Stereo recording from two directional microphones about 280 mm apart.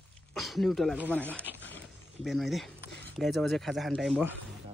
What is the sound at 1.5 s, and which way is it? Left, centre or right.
Speech, left.